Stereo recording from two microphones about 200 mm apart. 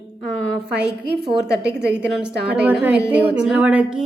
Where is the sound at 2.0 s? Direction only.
5° right (ahead or behind).